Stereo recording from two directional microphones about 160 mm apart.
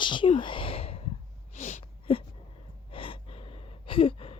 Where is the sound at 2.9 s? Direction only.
35° left (ahead or behind).